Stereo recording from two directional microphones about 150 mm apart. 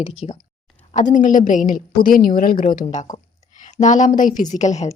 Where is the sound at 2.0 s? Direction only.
70° left (ahead or behind); by 4.9 s 50° left (ahead or behind).